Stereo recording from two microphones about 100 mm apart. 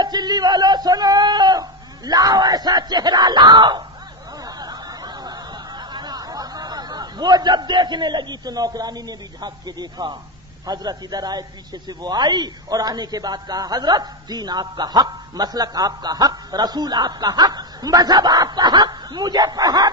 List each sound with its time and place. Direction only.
0.0 s a sound: 45° right (ahead or behind)
2.0 s yell: 40° right (ahead or behind)
4.4 s snicker: 40° right (ahead or behind)
10.7 s a man's voice: 40° right (ahead or behind)